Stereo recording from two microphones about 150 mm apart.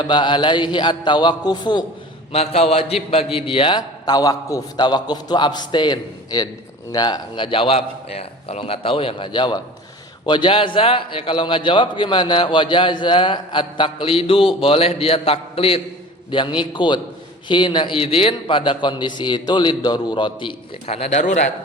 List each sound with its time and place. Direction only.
0.1 s a man's voice: 30° left (ahead or behind)
2.3 s a man's voice: 45° left (ahead or behind)